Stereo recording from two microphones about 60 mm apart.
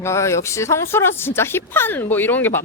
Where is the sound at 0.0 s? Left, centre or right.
Left.